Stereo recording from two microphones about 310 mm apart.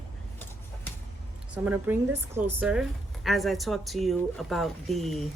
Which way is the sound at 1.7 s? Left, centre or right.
Centre.